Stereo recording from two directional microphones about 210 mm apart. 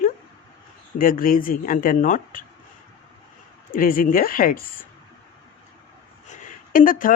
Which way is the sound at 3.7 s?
40° left (ahead or behind).